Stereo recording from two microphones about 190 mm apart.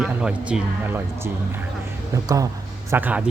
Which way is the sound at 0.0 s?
5° right (ahead or behind).